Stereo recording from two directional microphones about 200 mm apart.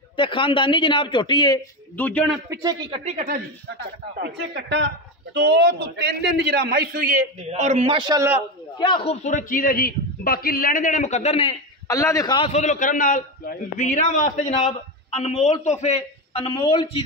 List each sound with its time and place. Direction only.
0.2 s a man's voice: 25° left (ahead or behind)
2.0 s a man's voice: 10° left (ahead or behind)
2.5 s a man's voice: 20° right (ahead or behind)
4.2 s a man's voice: 60° right (ahead or behind)
7.4 s a man's voice: 35° right (ahead or behind)
8.7 s a man's voice: 25° left (ahead or behind)
11.9 s a man's voice: 15° left (ahead or behind)